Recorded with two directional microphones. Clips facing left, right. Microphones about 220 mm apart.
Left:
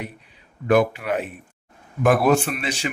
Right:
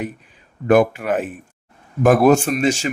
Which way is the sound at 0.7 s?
50° right (ahead or behind).